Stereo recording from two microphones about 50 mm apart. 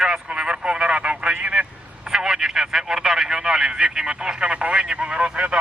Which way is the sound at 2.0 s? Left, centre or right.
Centre.